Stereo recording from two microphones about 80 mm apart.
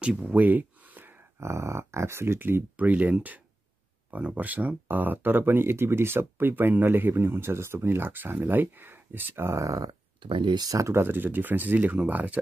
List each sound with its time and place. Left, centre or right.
0.0 s a sound: centre
1.4 s speech: right
10.2 s speech: right
10.6 s speech: right; by 12.4 s centre